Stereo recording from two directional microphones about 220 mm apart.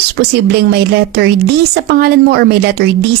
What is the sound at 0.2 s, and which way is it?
A woman's voice, 45° right (ahead or behind).